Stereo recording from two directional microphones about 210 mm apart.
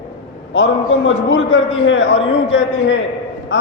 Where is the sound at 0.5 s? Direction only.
65° left (ahead or behind).